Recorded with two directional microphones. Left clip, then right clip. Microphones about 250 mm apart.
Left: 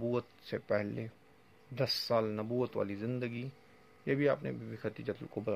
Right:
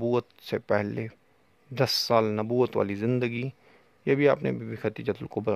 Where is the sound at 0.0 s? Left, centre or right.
Right.